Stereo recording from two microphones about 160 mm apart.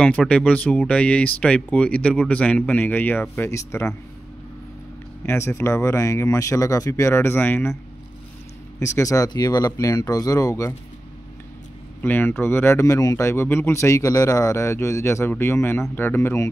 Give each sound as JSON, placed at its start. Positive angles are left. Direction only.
{"t": 0.0, "sound": "speech", "side_deg": 5}
{"t": 5.2, "sound": "speech", "side_deg": 15}
{"t": 8.7, "sound": "speech", "side_deg": 20}
{"t": 12.0, "sound": "speech", "side_deg": 10}